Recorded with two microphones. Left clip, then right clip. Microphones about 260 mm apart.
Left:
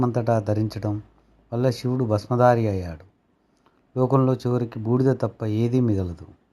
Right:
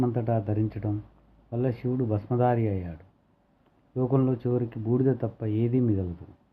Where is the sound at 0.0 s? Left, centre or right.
Centre.